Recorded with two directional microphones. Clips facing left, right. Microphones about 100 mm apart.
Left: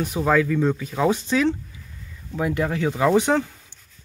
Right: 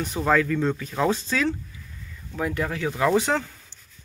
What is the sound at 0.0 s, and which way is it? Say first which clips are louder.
Speech: left 2 dB; 10° left (ahead or behind).